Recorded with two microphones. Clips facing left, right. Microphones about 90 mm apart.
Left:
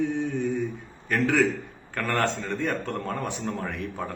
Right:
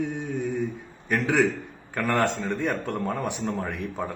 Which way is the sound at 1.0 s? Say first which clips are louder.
Even; 15° right (ahead or behind).